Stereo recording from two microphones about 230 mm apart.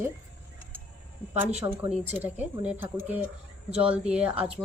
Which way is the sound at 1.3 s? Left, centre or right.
Centre.